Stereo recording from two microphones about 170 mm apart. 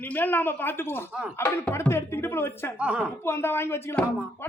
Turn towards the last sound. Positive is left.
turn(degrees=15)  # may be behind; listen again after turning